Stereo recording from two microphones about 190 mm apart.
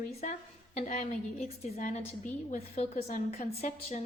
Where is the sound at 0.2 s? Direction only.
35° left (ahead or behind).